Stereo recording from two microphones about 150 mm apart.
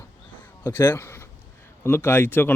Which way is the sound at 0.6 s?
15° left (ahead or behind).